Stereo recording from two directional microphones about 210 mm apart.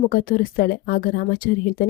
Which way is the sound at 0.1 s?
45° left (ahead or behind).